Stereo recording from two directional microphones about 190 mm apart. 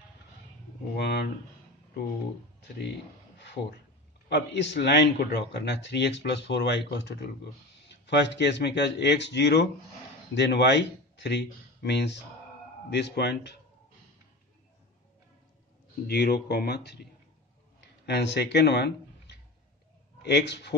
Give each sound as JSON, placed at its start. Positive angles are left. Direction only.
{"t": 0.9, "sound": "speech", "side_deg": 60}
{"t": 4.3, "sound": "speech", "side_deg": 65}
{"t": 16.1, "sound": "speech", "side_deg": 55}